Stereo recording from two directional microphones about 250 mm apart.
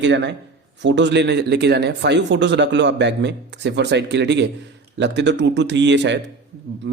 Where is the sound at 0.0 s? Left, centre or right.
Right.